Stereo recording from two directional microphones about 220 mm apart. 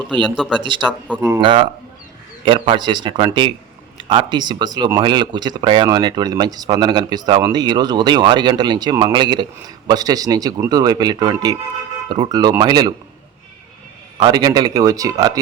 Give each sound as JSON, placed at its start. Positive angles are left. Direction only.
{"t": 0.3, "sound": "speech", "side_deg": 0}
{"t": 0.6, "sound": "a man's voice", "side_deg": -20}
{"t": 14.2, "sound": "a man's voice", "side_deg": -20}